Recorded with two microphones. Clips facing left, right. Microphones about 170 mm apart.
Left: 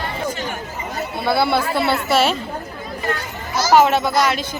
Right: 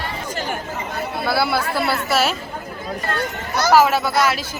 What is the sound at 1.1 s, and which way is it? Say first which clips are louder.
Speech: left 3 dB; centre (ahead or behind).